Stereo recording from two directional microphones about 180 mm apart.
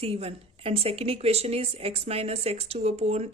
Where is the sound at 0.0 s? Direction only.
35° right (ahead or behind).